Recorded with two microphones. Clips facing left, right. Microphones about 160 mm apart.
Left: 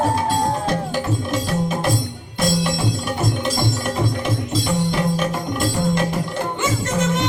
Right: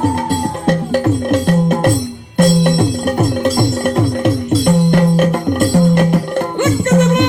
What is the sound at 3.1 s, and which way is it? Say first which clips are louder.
Music: right 8 dB; 60° right (ahead or behind).